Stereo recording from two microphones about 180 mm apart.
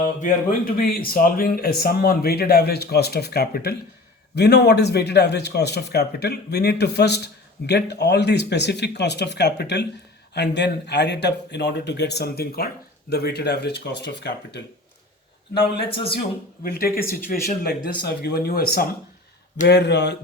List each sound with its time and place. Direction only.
0.2 s a man's voice: 55° left (ahead or behind); by 14.6 s 70° left (ahead or behind)
16.6 s a man's voice: 55° left (ahead or behind); by 20.1 s 70° left (ahead or behind)